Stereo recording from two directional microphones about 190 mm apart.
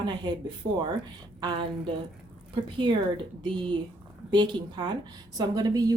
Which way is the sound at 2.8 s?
25° right (ahead or behind).